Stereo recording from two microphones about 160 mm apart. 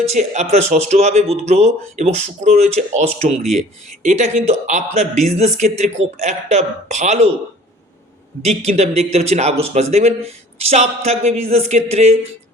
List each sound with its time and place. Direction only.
0.0 s speech: 45° right (ahead or behind)
8.4 s speech: 45° right (ahead or behind)